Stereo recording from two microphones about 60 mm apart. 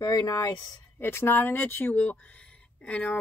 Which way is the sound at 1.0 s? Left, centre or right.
Left.